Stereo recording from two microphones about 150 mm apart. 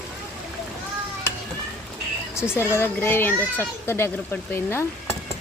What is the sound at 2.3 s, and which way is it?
A woman's voice, 15° left (ahead or behind).